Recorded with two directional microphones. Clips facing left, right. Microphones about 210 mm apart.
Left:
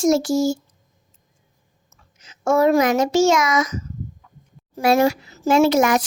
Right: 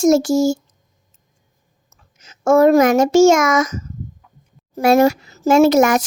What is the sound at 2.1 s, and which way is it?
A child's voice, 45° right (ahead or behind).